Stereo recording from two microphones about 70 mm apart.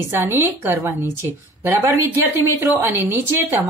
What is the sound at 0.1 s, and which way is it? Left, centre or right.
A woman's voice, right.